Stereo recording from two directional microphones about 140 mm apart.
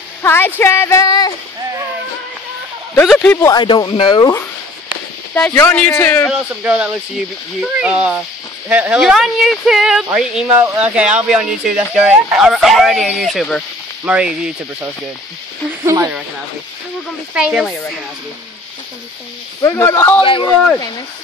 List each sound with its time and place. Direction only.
0.2 s speech: 15° left (ahead or behind)
2.9 s speech: 5° left (ahead or behind)
3.4 s speech: 30° left (ahead or behind)
5.3 s speech: 15° left (ahead or behind)
6.6 s speech: 10° right (ahead or behind)
15.8 s speech: 20° right (ahead or behind)
17.3 s speech: 5° right (ahead or behind)
19.6 s a man's voice: 20° left (ahead or behind)
20.2 s speech: 35° left (ahead or behind)